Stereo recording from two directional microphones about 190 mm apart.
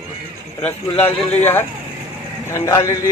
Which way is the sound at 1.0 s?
10° left (ahead or behind).